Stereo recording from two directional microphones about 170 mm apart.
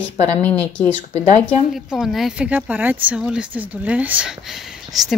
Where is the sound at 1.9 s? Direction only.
Centre (ahead or behind).